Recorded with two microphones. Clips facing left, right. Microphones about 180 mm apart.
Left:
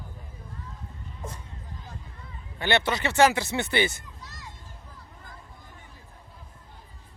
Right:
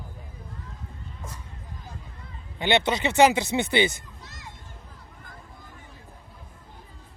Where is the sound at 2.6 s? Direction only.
20° right (ahead or behind).